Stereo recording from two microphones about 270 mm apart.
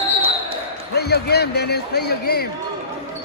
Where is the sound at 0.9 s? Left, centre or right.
Left.